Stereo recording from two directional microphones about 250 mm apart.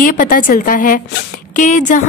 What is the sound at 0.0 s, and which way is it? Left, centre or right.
A woman's voice, left.